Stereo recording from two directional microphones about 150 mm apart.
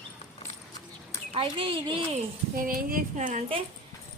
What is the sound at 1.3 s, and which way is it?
Speech, 35° right (ahead or behind).